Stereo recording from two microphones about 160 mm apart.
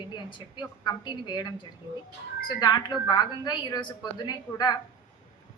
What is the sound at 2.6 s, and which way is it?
A woman's voice, 25° left (ahead or behind).